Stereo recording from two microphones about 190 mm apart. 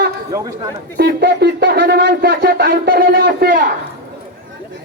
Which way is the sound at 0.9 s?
60° right (ahead or behind).